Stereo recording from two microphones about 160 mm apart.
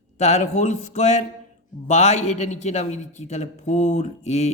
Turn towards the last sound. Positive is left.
turn(degrees=45)  # may be behind; listen again after turning